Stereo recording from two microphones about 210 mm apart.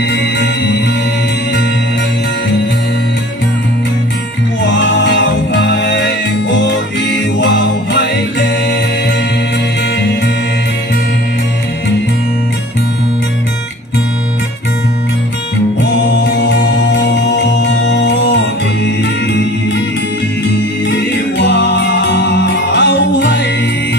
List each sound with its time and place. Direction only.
0.1 s music: 55° left (ahead or behind)
4.6 s music: 60° left (ahead or behind)
16.1 s music: 55° left (ahead or behind)
17.6 s music: 55° left (ahead or behind)
21.4 s music: 55° left (ahead or behind)